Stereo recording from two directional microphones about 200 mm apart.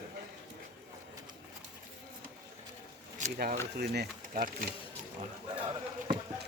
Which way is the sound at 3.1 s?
40° right (ahead or behind).